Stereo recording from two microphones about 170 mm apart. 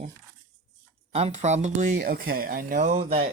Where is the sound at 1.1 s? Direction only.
40° right (ahead or behind).